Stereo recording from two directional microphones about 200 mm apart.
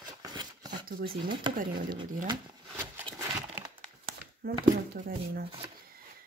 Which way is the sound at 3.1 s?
15° right (ahead or behind).